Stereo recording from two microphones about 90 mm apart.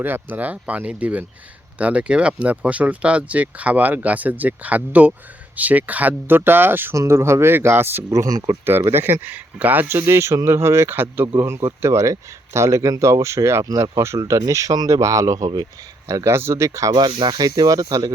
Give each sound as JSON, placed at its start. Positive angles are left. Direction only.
{"t": 0.0, "sound": "a man's voice", "side_deg": -20}
{"t": 8.9, "sound": "a man's voice", "side_deg": -25}
{"t": 17.1, "sound": "speech", "side_deg": -70}
{"t": 17.3, "sound": "speech", "side_deg": -45}